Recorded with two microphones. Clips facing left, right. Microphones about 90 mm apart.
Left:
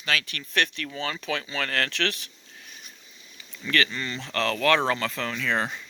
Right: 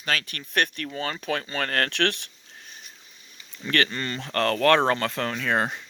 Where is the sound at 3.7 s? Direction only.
45° right (ahead or behind).